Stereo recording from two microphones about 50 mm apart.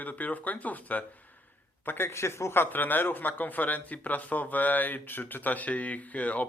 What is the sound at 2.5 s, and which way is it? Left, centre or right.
Speech, left.